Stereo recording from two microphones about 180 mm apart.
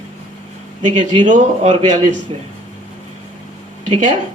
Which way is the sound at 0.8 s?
40° right (ahead or behind).